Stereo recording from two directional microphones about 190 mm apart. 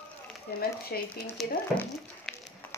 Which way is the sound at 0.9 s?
50° left (ahead or behind).